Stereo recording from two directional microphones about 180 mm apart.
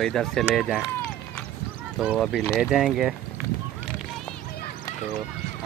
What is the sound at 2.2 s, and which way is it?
Speech, 5° left (ahead or behind).